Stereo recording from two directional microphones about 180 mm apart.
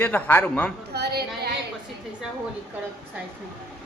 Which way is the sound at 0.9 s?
65° right (ahead or behind).